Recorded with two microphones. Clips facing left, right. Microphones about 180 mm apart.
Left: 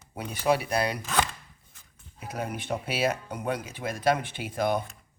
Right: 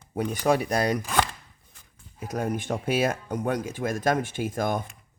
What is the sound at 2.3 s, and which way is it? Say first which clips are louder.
Speech: right 4 dB; 45° right (ahead or behind).